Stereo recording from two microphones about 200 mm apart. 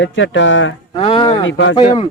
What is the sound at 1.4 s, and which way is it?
Speech, 65° left (ahead or behind).